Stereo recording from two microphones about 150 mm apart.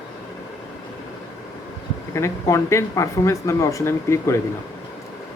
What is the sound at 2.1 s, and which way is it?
Speech, 20° left (ahead or behind).